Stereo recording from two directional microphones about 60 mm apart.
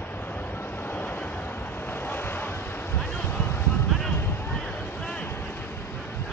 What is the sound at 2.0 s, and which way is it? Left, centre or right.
Vehicle, left.